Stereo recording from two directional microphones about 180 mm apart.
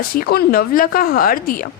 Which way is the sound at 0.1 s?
55° left (ahead or behind).